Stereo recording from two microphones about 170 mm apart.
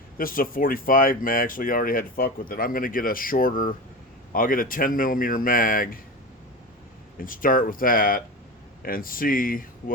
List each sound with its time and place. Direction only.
0.2 s speech: 55° left (ahead or behind)
7.2 s speech: 55° left (ahead or behind)